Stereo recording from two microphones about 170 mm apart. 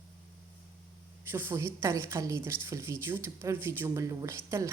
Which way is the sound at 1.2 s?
15° right (ahead or behind).